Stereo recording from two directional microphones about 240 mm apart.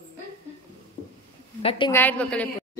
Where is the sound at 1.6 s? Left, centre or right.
Left.